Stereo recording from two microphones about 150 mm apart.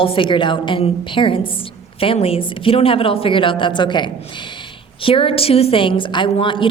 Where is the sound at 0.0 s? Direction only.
35° left (ahead or behind).